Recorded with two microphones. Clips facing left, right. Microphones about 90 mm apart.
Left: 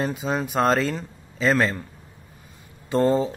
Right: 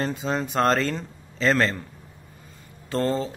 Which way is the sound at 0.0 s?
5° left (ahead or behind).